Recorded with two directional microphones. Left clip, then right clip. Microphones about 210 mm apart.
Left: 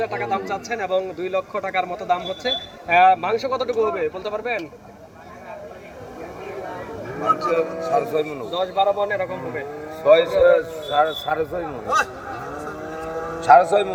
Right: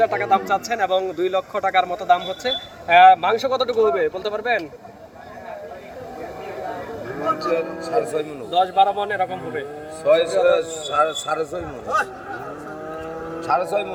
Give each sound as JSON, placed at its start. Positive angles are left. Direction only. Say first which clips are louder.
{"t": 0.0, "sound": "speech", "louder": "right 6 dB", "side_deg": -40}
{"t": 7.5, "sound": "a man's voice", "louder": "left 1 dB", "side_deg": 25}
{"t": 8.5, "sound": "a man's voice", "louder": "right 3 dB", "side_deg": -45}
{"t": 10.1, "sound": "a man's voice", "louder": "left 2 dB", "side_deg": 20}
{"t": 11.9, "sound": "speech", "louder": "left 1 dB", "side_deg": -5}
{"t": 13.4, "sound": "a man's voice", "louder": "left 8 dB", "side_deg": 30}